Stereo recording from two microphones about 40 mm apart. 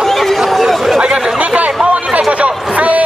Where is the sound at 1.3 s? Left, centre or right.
Right.